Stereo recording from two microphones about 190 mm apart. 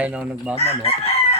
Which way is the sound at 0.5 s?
30° left (ahead or behind).